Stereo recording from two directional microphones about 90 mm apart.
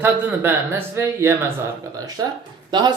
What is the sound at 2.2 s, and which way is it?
Speech, 40° right (ahead or behind).